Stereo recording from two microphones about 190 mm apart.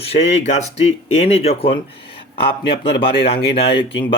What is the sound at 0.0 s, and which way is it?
Speech, 35° left (ahead or behind).